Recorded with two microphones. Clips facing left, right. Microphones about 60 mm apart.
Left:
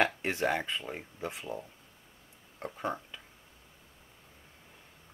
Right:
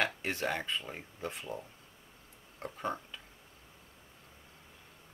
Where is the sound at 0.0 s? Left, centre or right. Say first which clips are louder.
Left 4 dB; centre.